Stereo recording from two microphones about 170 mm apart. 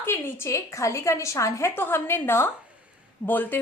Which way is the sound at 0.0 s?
15° left (ahead or behind).